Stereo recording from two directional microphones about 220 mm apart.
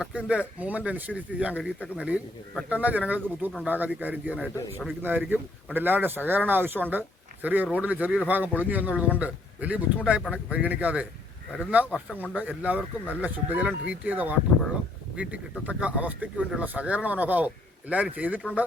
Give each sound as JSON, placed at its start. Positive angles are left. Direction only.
{"t": 0.0, "sound": "speech", "side_deg": -5}
{"t": 12.3, "sound": "speech", "side_deg": -5}